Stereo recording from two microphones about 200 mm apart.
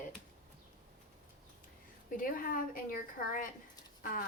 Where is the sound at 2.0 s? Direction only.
45° left (ahead or behind).